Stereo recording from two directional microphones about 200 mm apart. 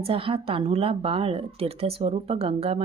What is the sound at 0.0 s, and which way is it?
Speech, 25° right (ahead or behind).